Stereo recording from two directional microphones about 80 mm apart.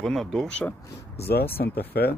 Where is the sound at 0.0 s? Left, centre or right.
Centre.